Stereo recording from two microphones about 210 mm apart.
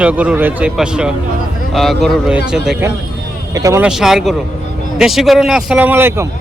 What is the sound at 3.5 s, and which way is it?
Speech, 15° right (ahead or behind).